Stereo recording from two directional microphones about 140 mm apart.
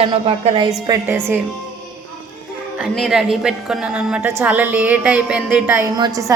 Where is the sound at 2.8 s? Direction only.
5° right (ahead or behind).